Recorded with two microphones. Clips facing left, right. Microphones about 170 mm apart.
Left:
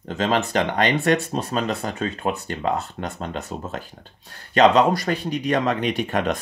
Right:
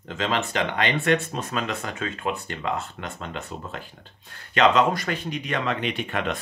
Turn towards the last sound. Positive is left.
turn(degrees=40)  # may be behind; listen again after turning